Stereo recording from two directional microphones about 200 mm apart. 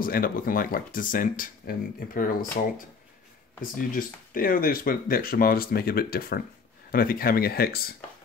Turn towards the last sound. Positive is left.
turn(degrees=50)  # may be behind; listen again after turning